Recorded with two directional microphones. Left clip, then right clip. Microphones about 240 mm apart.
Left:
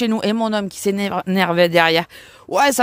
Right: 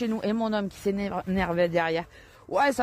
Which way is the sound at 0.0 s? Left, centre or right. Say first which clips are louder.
Left 9 dB; left.